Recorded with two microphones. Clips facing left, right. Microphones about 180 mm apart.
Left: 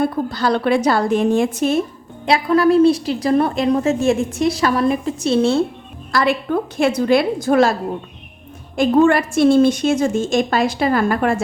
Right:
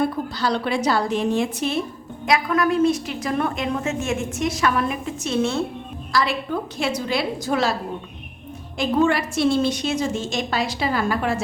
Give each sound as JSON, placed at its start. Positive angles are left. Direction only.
{"t": 0.3, "sound": "a woman's voice", "side_deg": 50}
{"t": 2.2, "sound": "a woman's voice", "side_deg": 30}
{"t": 6.1, "sound": "a woman's voice", "side_deg": 55}
{"t": 8.7, "sound": "a woman's voice", "side_deg": 50}